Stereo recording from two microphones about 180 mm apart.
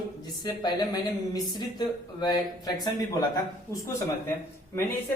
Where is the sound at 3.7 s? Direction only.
20° left (ahead or behind).